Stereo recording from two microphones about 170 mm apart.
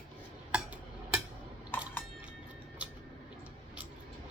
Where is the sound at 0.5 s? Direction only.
5° right (ahead or behind).